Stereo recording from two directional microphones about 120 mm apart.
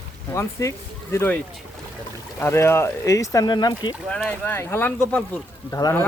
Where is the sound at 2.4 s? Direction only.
20° left (ahead or behind).